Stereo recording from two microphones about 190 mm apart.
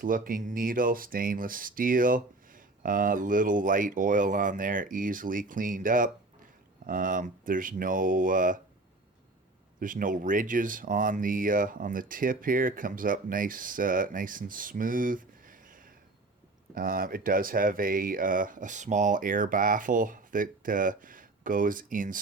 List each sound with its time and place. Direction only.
0.0 s speech: 45° right (ahead or behind)
9.8 s speech: 45° right (ahead or behind)